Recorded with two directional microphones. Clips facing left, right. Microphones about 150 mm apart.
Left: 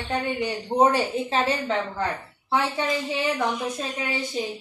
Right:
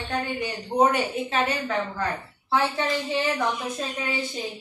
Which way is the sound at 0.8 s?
30° left (ahead or behind).